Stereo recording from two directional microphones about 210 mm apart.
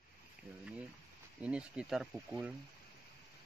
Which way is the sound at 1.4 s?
5° right (ahead or behind).